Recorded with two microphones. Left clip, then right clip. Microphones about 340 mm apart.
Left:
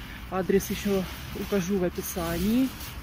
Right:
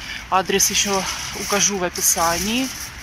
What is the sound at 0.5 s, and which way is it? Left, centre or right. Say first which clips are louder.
Speech: right 7 dB; right.